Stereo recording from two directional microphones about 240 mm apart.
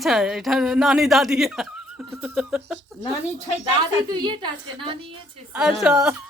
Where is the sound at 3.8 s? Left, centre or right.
Centre.